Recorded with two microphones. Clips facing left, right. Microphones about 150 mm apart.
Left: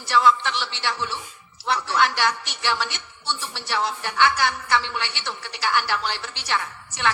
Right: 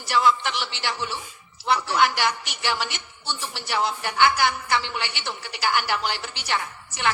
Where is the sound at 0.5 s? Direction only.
30° left (ahead or behind).